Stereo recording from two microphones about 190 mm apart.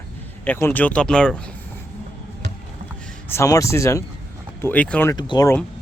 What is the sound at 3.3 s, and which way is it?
Speech, 15° left (ahead or behind).